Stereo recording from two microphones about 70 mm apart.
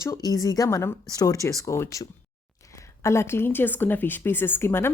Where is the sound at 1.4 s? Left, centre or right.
Left.